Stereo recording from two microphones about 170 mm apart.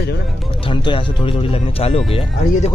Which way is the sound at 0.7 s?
30° left (ahead or behind).